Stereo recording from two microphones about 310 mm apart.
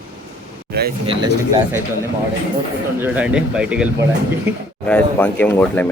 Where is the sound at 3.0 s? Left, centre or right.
Centre.